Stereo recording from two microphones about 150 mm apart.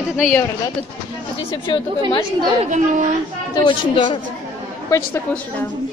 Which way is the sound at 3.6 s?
35° left (ahead or behind).